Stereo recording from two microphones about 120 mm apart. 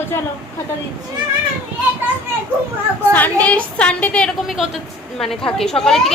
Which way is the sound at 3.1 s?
15° left (ahead or behind).